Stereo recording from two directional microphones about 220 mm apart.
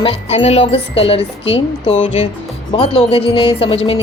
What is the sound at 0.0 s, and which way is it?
Music, 25° left (ahead or behind).